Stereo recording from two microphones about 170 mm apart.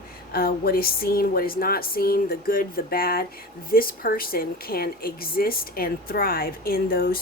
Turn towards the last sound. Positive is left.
turn(degrees=60)  # may be behind; listen again after turning